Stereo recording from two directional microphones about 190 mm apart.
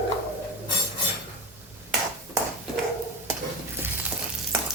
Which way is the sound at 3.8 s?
10° right (ahead or behind).